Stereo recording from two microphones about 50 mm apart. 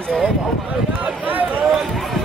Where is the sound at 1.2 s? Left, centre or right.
Right.